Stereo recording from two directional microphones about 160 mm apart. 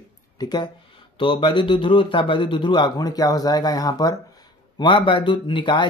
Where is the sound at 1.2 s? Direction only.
35° left (ahead or behind).